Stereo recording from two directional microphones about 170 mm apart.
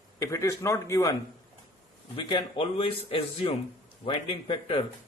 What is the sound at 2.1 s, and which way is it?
A man's voice, 30° left (ahead or behind).